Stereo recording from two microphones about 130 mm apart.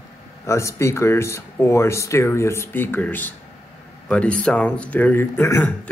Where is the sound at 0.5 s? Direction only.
20° left (ahead or behind).